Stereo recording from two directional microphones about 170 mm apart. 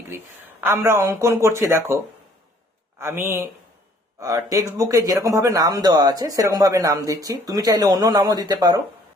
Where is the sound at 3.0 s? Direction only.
15° right (ahead or behind).